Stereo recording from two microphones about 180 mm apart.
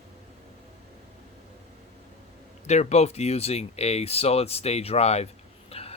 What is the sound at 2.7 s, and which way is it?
Speech, 40° left (ahead or behind).